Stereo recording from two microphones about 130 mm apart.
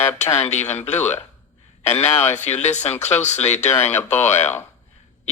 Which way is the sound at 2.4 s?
60° left (ahead or behind).